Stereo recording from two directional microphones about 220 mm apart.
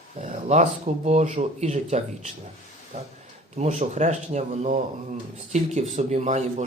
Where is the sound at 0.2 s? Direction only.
35° right (ahead or behind).